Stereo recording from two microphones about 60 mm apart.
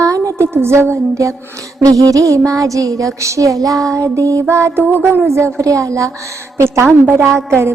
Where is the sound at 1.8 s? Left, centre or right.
Right.